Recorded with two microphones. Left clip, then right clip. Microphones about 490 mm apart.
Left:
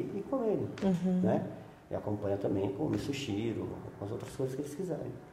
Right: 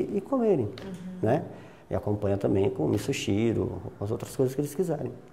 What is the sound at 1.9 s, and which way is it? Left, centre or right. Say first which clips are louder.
Speech: right 6 dB; right.